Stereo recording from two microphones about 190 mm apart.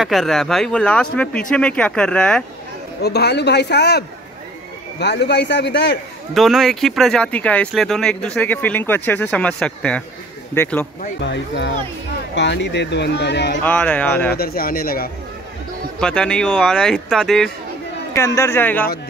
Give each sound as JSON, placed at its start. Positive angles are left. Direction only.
{"t": 0.0, "sound": "speech", "side_deg": 0}
{"t": 3.0, "sound": "speech", "side_deg": 60}
{"t": 6.3, "sound": "a man's voice", "side_deg": 0}
{"t": 11.1, "sound": "speech", "side_deg": 65}
{"t": 13.7, "sound": "a man's voice", "side_deg": 10}
{"t": 14.3, "sound": "speech", "side_deg": 55}
{"t": 16.0, "sound": "speech", "side_deg": 5}
{"t": 18.1, "sound": "a man's voice", "side_deg": 15}